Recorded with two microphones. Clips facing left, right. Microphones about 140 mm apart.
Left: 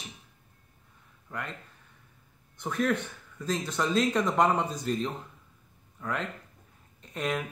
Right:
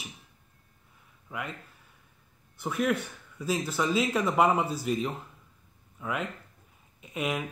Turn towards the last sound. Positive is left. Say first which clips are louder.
# even
turn(degrees=-10)  # may be behind; listen again after turning